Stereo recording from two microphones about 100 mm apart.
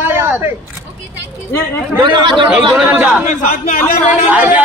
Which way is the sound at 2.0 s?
50° right (ahead or behind).